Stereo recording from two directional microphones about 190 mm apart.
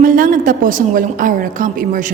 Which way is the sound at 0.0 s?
45° right (ahead or behind).